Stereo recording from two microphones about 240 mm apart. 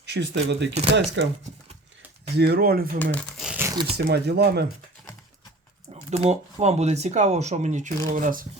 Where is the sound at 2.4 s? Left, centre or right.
Right.